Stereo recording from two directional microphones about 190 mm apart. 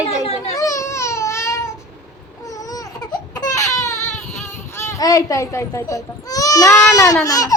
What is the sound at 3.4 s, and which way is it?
Baby cry, 15° left (ahead or behind).